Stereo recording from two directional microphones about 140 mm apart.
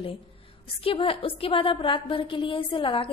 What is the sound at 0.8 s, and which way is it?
A woman's voice, 40° left (ahead or behind).